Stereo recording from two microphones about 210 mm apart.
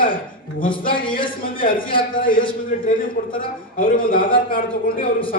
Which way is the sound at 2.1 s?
40° left (ahead or behind).